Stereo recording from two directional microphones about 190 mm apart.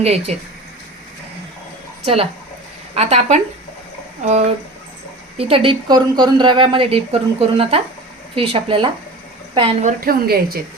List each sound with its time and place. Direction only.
0.0 s speech: 35° right (ahead or behind)
2.9 s a woman's voice: 35° right (ahead or behind)
10.0 s a woman's voice: 50° right (ahead or behind)